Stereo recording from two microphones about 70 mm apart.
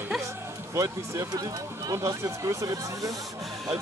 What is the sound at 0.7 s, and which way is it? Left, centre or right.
Speech, right.